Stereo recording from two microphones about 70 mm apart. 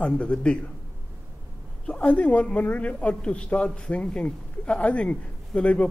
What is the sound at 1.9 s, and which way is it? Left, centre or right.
A woman's voice, centre.